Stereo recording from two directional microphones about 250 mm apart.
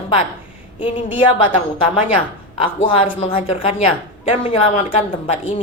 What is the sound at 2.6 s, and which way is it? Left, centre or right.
A woman's voice, left.